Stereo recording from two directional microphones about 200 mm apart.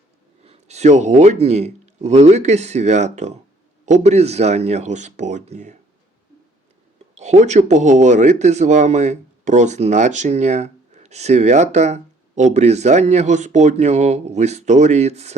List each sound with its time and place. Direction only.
0.4 s speech: 30° right (ahead or behind)
7.2 s speech: 35° right (ahead or behind)